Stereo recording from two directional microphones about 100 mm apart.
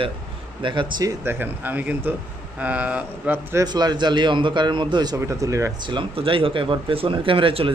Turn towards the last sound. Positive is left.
turn(degrees=-60)  # may be behind; listen again after turning